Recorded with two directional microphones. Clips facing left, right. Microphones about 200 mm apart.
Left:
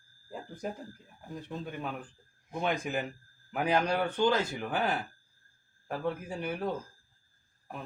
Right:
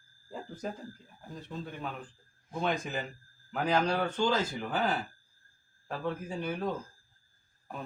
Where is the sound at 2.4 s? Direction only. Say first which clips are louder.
Even; 15° left (ahead or behind).